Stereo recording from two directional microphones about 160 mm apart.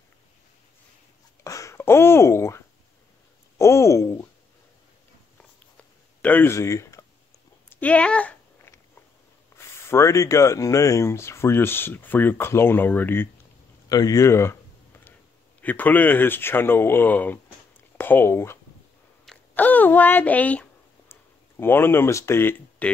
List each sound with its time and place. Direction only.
1.4 s a sound: 20° left (ahead or behind)
6.2 s speech: 10° left (ahead or behind)
7.7 s a sound: 10° left (ahead or behind)
9.6 s speech: 15° left (ahead or behind)
13.8 s speech: 25° left (ahead or behind)
15.6 s speech: 10° left (ahead or behind)